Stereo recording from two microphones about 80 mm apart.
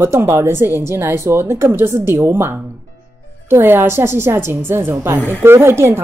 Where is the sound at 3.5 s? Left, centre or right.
Right.